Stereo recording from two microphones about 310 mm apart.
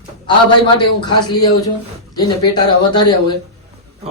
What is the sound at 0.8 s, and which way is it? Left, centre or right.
Speech, centre.